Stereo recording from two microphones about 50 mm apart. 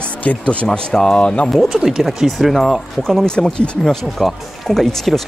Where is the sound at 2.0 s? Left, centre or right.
Centre.